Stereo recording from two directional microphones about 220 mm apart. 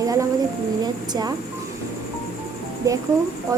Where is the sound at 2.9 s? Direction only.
15° right (ahead or behind).